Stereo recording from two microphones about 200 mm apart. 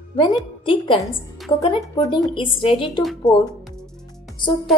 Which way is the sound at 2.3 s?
25° left (ahead or behind).